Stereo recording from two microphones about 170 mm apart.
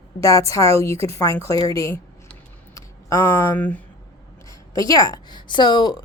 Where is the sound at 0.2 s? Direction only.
20° left (ahead or behind).